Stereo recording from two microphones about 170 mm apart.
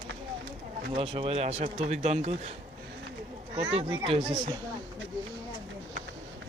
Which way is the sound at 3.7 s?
35° right (ahead or behind).